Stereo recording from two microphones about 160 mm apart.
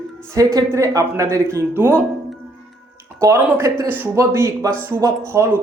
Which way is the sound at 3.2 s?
15° right (ahead or behind).